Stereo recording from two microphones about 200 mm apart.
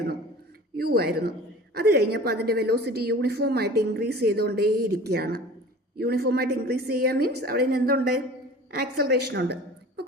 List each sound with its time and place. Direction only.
0.8 s a woman's voice: 50° right (ahead or behind)